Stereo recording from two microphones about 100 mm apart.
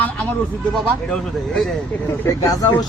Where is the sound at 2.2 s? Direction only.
35° left (ahead or behind).